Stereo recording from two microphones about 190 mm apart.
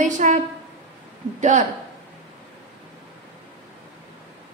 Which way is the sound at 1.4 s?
40° right (ahead or behind).